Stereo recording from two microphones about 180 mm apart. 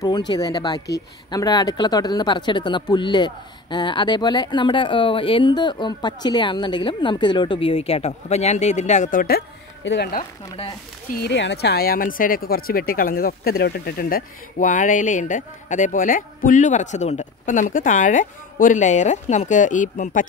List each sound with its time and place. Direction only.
0.3 s speech: 20° left (ahead or behind); by 9.4 s 50° left (ahead or behind)
9.8 s speech: 80° left
11.2 s speech: 70° left (ahead or behind); by 20.2 s 45° left (ahead or behind)